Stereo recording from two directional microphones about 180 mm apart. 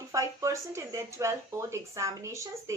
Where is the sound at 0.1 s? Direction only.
20° right (ahead or behind).